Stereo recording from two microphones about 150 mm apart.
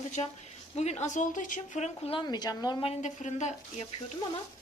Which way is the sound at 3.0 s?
55° left (ahead or behind).